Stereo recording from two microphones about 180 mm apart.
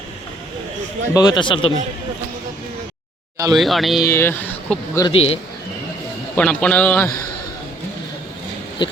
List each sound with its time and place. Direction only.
1.1 s speech: 20° left (ahead or behind)
3.5 s speech: centre (ahead or behind)
4.1 s speech: 10° left (ahead or behind)
5.0 s a man's voice: 35° left (ahead or behind)
6.3 s speech: 5° left (ahead or behind)
8.8 s speech: 25° left (ahead or behind)